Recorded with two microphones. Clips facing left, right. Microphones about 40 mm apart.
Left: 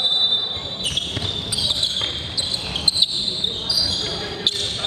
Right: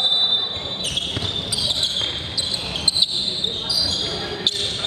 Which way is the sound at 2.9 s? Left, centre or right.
Centre.